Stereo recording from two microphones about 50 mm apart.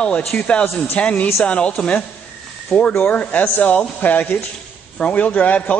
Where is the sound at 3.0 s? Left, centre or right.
Left.